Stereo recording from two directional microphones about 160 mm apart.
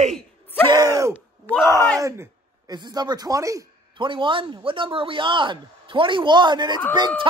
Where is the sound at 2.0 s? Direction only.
20° right (ahead or behind).